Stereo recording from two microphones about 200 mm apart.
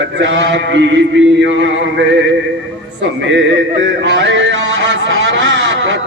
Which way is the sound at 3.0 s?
60° right (ahead or behind).